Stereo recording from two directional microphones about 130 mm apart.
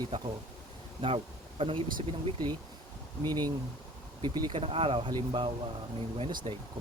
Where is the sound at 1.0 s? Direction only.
45° right (ahead or behind).